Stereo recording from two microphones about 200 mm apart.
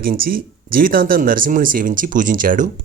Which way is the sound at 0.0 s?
45° right (ahead or behind).